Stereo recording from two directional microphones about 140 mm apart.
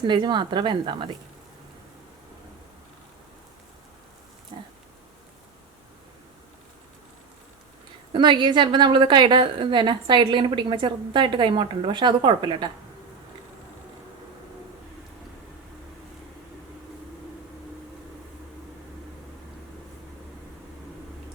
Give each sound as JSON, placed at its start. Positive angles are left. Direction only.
{"t": 0.0, "sound": "a woman's voice", "side_deg": -35}
{"t": 4.5, "sound": "dog", "side_deg": -35}
{"t": 8.1, "sound": "a woman's voice", "side_deg": -35}